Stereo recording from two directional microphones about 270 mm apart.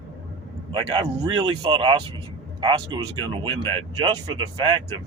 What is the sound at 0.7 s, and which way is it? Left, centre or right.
Speech, centre.